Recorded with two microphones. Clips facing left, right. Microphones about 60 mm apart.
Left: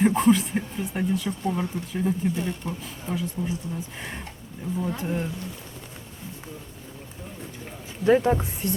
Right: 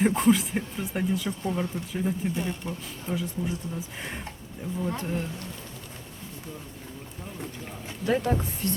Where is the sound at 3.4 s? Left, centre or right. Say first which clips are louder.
Left 1 dB; left.